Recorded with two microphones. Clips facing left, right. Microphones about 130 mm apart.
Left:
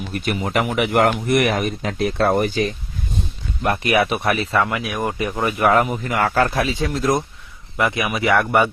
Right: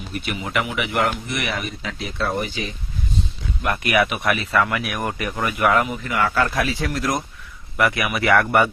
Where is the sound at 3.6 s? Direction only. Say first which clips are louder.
Left 2 dB; 30° left (ahead or behind).